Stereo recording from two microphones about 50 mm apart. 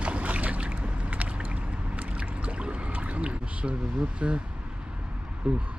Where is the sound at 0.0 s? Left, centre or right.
Right.